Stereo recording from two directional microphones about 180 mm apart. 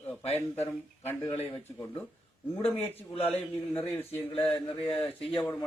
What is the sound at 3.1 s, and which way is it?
Mantra, 30° left (ahead or behind).